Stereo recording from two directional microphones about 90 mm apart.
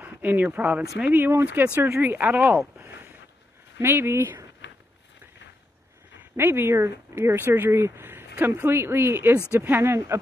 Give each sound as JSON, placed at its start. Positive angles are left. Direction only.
{"t": 0.0, "sound": "speech", "side_deg": -20}
{"t": 2.8, "sound": "a sound", "side_deg": -25}
{"t": 3.8, "sound": "speech", "side_deg": -25}
{"t": 6.3, "sound": "speech", "side_deg": -25}